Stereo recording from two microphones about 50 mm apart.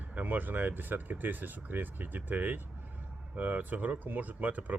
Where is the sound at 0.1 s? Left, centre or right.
Right.